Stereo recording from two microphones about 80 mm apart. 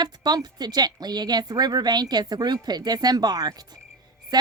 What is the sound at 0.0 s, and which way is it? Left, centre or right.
Speech, right.